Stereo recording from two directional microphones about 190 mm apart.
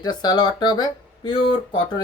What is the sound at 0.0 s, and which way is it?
Speech, 20° left (ahead or behind).